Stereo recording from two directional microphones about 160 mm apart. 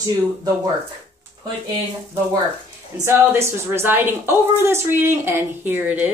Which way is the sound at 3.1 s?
15° right (ahead or behind).